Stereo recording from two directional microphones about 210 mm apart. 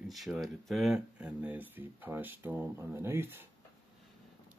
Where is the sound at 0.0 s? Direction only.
Centre (ahead or behind).